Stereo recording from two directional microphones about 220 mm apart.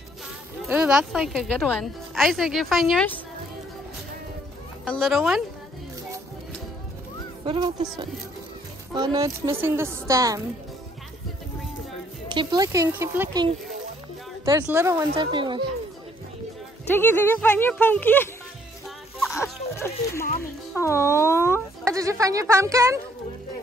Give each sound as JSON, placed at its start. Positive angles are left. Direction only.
{"t": 0.7, "sound": "speech", "side_deg": -5}
{"t": 4.8, "sound": "speech", "side_deg": 0}
{"t": 7.4, "sound": "a child's voice", "side_deg": -20}
{"t": 8.9, "sound": "speech", "side_deg": -15}
{"t": 12.4, "sound": "speech", "side_deg": -15}
{"t": 14.4, "sound": "a child's voice", "side_deg": -15}
{"t": 16.9, "sound": "speech", "side_deg": 10}
{"t": 19.7, "sound": "speech", "side_deg": 10}
{"t": 21.8, "sound": "speech", "side_deg": -15}